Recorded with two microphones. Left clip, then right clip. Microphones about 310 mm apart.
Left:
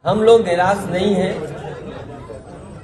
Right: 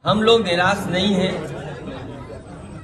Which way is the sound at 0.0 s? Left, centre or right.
Centre.